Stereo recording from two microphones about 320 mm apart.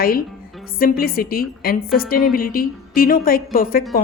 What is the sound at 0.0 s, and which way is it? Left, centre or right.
A woman's voice, left.